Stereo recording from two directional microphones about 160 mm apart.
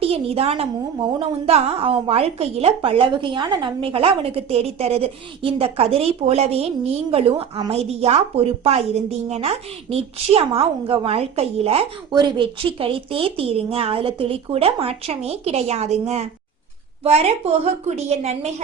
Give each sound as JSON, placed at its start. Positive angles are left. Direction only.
{"t": 0.0, "sound": "a woman's voice", "side_deg": -40}